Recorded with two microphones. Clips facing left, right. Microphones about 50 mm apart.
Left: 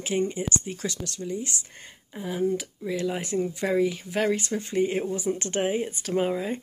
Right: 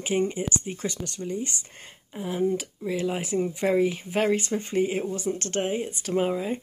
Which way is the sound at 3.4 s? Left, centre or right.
Centre.